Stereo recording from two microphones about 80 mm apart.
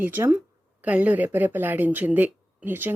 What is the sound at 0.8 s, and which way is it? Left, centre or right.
Speech, centre.